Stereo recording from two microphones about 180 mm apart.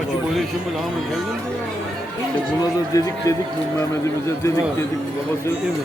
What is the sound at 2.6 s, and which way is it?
Speech, 20° left (ahead or behind).